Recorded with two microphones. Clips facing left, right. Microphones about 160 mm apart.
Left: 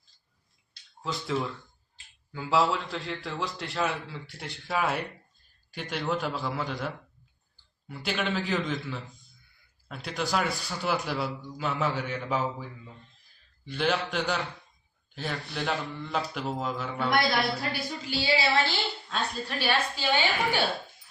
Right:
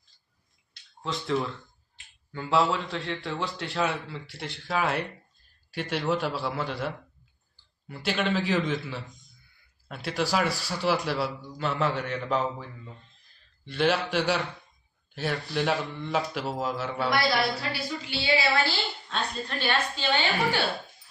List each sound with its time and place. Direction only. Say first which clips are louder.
1.0 s a man's voice: right 2 dB; centre (ahead or behind)
17.6 s a woman's voice: even; 45° left (ahead or behind)
18.3 s a woman's voice: right 1 dB; 30° left (ahead or behind)
19.0 s a woman's voice: even; 5° left (ahead or behind)